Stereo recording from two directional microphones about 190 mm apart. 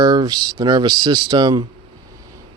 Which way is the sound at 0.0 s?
20° right (ahead or behind).